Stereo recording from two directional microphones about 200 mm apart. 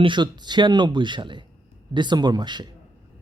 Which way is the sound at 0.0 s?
25° right (ahead or behind).